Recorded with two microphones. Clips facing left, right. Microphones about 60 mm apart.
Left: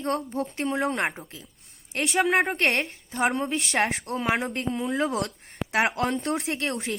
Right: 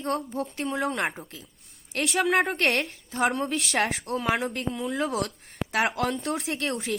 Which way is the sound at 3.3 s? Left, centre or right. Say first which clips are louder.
Left 1 dB; centre.